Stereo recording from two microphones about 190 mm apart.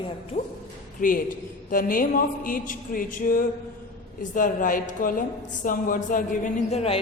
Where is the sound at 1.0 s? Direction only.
45° left (ahead or behind).